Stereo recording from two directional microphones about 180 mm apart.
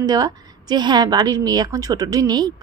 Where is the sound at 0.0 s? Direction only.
20° right (ahead or behind).